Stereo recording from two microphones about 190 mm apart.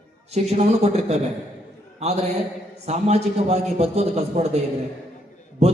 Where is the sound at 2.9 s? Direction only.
35° right (ahead or behind).